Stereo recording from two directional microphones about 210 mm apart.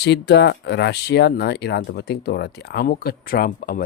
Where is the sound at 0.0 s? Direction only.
55° left (ahead or behind).